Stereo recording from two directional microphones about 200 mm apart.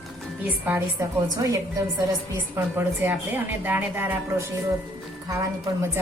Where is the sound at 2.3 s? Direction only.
10° right (ahead or behind).